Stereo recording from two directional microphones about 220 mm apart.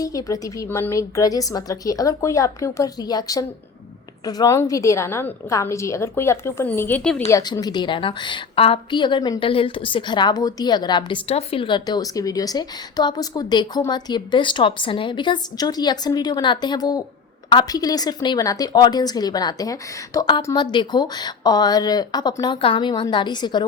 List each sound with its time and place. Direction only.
0.0 s a woman's voice: 15° left (ahead or behind)